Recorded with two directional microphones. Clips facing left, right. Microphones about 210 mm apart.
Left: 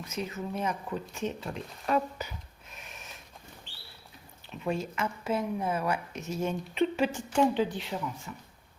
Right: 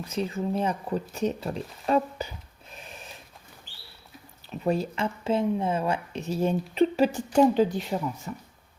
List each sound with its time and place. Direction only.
0.0 s speech: 30° right (ahead or behind)
2.7 s a sound: 30° right (ahead or behind)
4.6 s speech: 35° right (ahead or behind)